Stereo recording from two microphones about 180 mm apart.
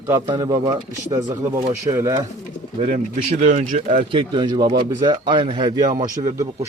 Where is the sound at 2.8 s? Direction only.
40° right (ahead or behind).